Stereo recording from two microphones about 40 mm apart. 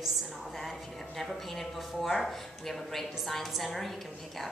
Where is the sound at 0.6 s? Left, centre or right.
Centre.